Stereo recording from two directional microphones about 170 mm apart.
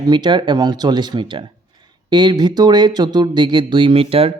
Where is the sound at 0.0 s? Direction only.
25° right (ahead or behind).